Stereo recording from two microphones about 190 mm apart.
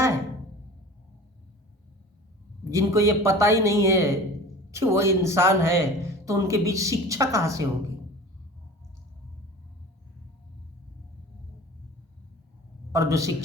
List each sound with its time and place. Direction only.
2.6 s speech: 15° right (ahead or behind)
12.9 s a man's voice: 15° right (ahead or behind)